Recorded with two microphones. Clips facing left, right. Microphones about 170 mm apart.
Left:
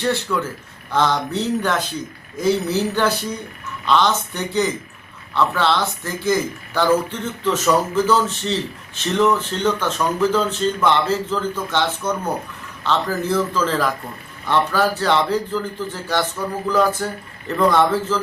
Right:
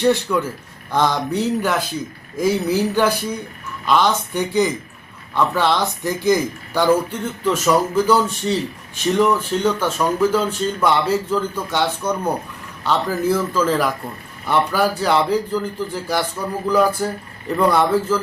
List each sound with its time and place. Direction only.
0.0 s speech: 15° right (ahead or behind)